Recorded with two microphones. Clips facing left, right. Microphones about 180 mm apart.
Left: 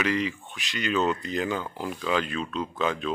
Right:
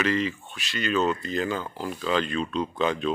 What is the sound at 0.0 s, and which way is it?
Speech, 15° left (ahead or behind).